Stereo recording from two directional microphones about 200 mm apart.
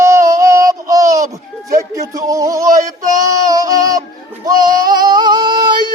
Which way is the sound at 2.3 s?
15° right (ahead or behind).